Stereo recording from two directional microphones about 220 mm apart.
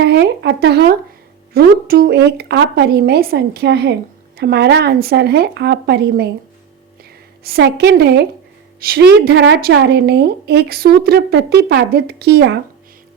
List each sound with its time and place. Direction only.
0.0 s a woman's voice: 50° right (ahead or behind)
7.4 s a woman's voice: 45° right (ahead or behind)